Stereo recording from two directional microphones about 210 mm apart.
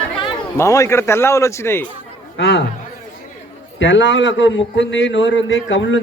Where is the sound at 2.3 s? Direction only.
55° left (ahead or behind).